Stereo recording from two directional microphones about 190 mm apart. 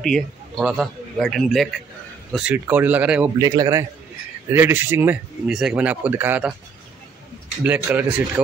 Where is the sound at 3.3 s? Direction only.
20° right (ahead or behind).